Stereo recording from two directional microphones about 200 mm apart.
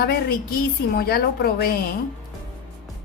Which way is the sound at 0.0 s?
50° left (ahead or behind).